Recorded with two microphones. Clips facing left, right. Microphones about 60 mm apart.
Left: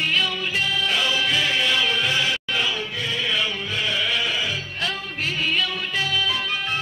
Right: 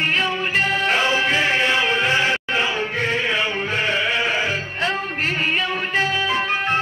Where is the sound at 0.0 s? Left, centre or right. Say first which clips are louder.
Right 3 dB; right.